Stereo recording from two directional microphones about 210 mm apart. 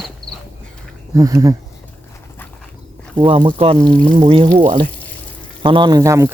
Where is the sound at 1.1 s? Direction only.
15° right (ahead or behind).